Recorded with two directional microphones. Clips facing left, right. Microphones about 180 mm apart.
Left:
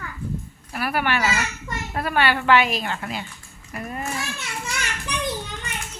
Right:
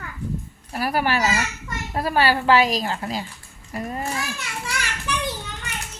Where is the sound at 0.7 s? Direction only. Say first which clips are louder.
Right 2 dB; 35° right (ahead or behind).